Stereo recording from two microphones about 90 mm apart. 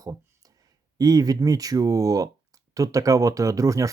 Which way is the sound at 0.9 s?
45° right (ahead or behind).